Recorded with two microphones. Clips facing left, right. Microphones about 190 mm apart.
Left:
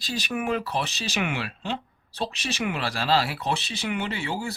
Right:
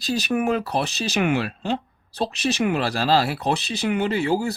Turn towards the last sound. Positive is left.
turn(degrees=-40)  # may be behind; listen again after turning